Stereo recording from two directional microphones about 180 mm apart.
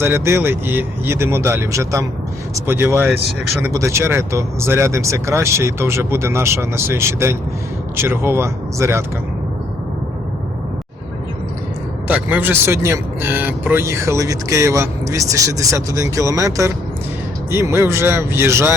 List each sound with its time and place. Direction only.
0.0 s speech: 15° right (ahead or behind)
12.0 s speech: 10° right (ahead or behind)